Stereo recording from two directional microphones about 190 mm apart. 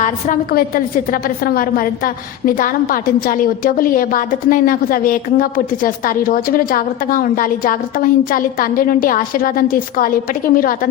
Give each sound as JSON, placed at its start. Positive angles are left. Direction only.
{"t": 0.0, "sound": "a woman's voice", "side_deg": 50}